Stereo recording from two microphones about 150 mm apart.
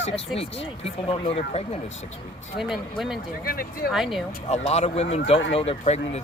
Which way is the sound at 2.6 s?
Centre (ahead or behind).